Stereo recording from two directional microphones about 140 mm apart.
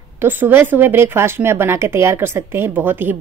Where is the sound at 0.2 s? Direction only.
15° right (ahead or behind).